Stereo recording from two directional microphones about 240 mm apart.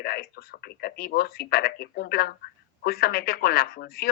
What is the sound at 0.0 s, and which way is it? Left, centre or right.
Speech, left.